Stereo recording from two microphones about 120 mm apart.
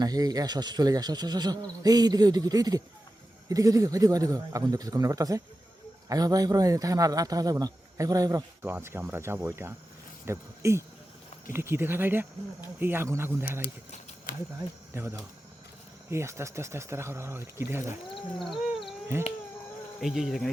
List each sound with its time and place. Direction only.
0.0 s a man's voice: 35° right (ahead or behind)
8.6 s a man's voice: 20° right (ahead or behind)
14.9 s a man's voice: 25° right (ahead or behind)
18.3 s wild animals: centre (ahead or behind)
20.0 s speech: centre (ahead or behind)